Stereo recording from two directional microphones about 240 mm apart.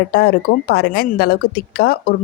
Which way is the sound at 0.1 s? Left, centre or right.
Left.